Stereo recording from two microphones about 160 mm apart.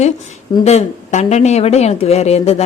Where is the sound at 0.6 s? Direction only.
45° left (ahead or behind).